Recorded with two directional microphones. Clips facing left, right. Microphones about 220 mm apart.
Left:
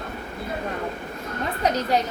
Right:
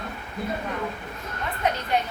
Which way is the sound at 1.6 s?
40° left (ahead or behind).